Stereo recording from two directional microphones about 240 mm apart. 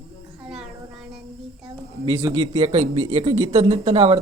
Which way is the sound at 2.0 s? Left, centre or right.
Centre.